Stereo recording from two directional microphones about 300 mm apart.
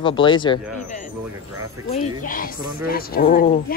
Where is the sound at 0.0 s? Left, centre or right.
Centre.